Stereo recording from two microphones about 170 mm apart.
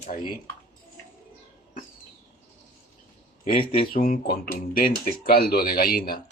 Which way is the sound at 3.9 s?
55° left (ahead or behind).